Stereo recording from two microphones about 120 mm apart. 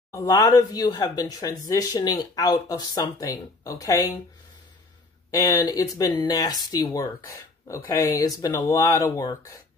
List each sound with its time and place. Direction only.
0.1 s speech: 25° left (ahead or behind)
5.3 s speech: 30° left (ahead or behind)